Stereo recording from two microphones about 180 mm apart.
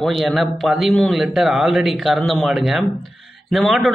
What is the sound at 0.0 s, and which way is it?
A man's voice, centre (ahead or behind).